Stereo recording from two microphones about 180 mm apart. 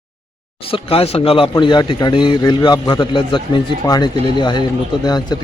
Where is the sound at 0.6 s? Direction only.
30° left (ahead or behind).